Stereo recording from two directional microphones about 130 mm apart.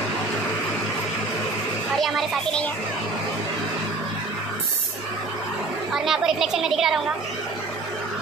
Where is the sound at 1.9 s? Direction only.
Centre (ahead or behind).